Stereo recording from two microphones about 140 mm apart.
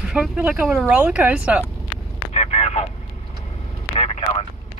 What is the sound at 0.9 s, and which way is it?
Speech, 10° right (ahead or behind).